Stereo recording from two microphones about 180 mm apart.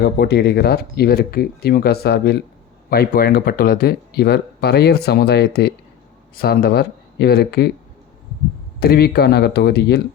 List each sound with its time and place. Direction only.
0.0 s speech: 65° left (ahead or behind)
8.8 s speech: 60° left (ahead or behind)